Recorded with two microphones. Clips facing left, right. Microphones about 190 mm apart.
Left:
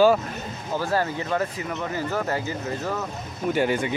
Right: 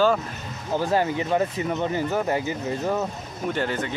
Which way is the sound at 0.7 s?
15° right (ahead or behind).